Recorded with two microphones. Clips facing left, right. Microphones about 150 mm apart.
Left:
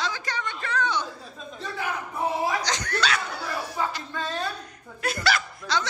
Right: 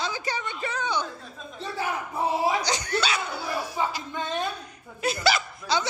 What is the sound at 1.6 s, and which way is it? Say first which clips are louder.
A man's voice: right 2 dB; 30° right (ahead or behind).